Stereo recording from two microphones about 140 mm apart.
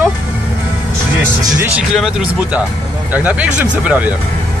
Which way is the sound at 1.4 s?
25° right (ahead or behind).